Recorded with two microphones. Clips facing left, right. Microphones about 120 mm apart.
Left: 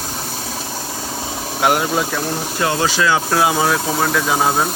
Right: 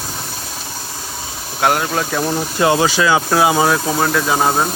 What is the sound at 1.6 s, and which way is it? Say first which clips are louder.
Speech: even; 15° left (ahead or behind).